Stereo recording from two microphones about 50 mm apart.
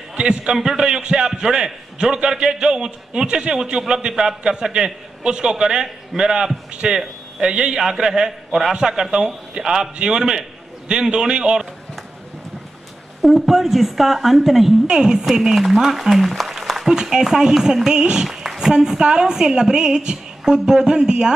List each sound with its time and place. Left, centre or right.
0.1 s a man's voice: centre
13.2 s a woman's voice: centre
14.9 s speech: centre